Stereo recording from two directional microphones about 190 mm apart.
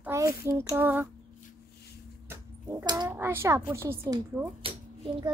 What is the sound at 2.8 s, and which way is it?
Speech, 20° right (ahead or behind).